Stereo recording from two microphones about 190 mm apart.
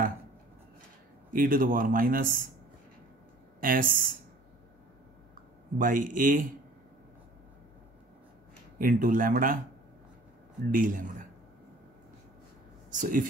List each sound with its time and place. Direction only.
1.3 s speech: 45° right (ahead or behind)
3.6 s speech: 45° right (ahead or behind)
5.3 s speech: 45° right (ahead or behind)
8.7 s speech: 45° right (ahead or behind)
10.7 s speech: 45° right (ahead or behind)
12.9 s speech: 45° right (ahead or behind)